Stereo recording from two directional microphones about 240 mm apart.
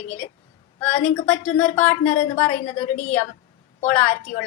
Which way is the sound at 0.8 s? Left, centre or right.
Left.